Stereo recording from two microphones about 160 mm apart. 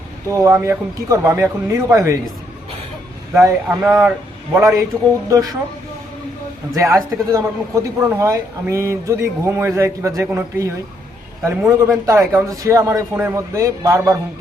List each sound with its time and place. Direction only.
0.3 s a man's voice: 20° right (ahead or behind)
3.3 s speech: 15° right (ahead or behind)
6.7 s a man's voice: 20° right (ahead or behind)